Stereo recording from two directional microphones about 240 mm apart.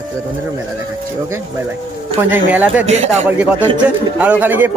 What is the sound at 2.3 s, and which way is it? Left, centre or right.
Speech, centre.